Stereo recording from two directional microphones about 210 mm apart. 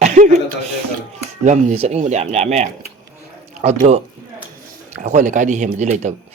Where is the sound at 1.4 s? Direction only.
30° right (ahead or behind).